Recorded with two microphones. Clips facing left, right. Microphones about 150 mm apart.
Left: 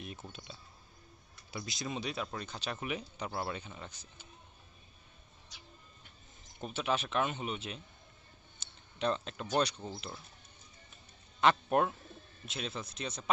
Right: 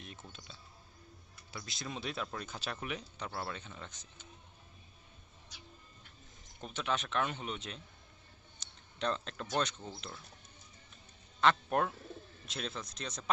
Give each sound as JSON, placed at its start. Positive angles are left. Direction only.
{"t": 0.0, "sound": "a sound", "side_deg": 15}
{"t": 1.7, "sound": "speech", "side_deg": 0}
{"t": 2.8, "sound": "speech", "side_deg": 10}
{"t": 6.6, "sound": "speech", "side_deg": 10}
{"t": 11.4, "sound": "speech", "side_deg": 10}